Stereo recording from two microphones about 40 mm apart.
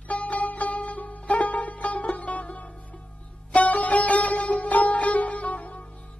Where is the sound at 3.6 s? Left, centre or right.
Left.